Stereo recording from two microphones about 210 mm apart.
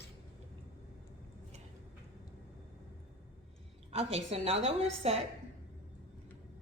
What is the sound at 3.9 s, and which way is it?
A woman's voice, 30° right (ahead or behind).